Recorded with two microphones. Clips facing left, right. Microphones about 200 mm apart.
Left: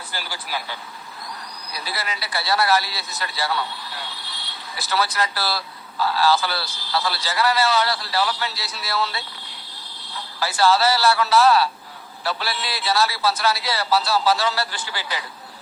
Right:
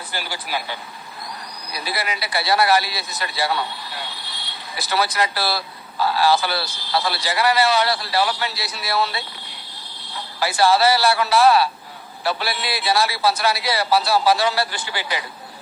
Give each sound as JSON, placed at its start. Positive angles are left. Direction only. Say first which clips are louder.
{"t": 0.1, "sound": "speech", "louder": "right 3 dB", "side_deg": -20}
{"t": 10.4, "sound": "speech", "louder": "right 2 dB", "side_deg": -15}